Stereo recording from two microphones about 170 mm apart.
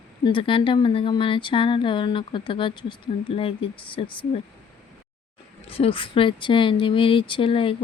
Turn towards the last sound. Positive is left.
turn(degrees=30)  # may be behind; listen again after turning